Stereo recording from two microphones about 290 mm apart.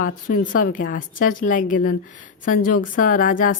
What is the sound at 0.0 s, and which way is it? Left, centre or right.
Speech, left.